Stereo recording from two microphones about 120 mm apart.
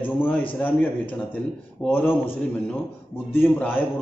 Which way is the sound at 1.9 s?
15° left (ahead or behind).